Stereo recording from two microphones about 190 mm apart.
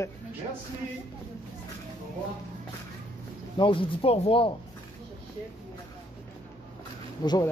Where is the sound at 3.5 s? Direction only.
25° left (ahead or behind).